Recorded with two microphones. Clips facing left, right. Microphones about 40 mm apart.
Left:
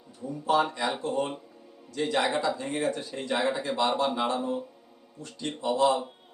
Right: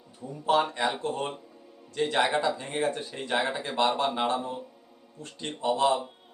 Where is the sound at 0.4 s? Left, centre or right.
Right.